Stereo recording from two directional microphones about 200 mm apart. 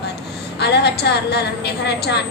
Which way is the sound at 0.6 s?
55° left (ahead or behind).